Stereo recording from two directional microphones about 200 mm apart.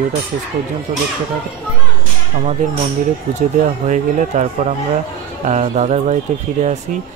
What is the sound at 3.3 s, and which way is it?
Speech, 40° right (ahead or behind).